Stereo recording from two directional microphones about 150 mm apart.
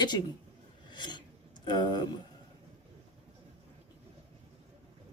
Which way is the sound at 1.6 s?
30° left (ahead or behind).